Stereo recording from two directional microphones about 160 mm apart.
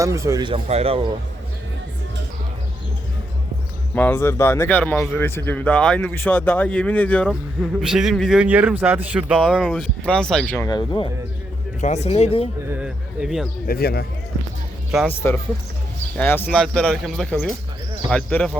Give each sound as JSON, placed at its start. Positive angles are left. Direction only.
{"t": 0.0, "sound": "speech", "side_deg": -20}
{"t": 3.9, "sound": "a man's voice", "side_deg": 15}
{"t": 7.6, "sound": "a man's voice", "side_deg": -5}
{"t": 10.6, "sound": "speech", "side_deg": 25}
{"t": 11.8, "sound": "speech", "side_deg": 45}
{"t": 12.6, "sound": "a sound", "side_deg": -10}
{"t": 13.7, "sound": "speech", "side_deg": 75}
{"t": 15.2, "sound": "a man's voice", "side_deg": 10}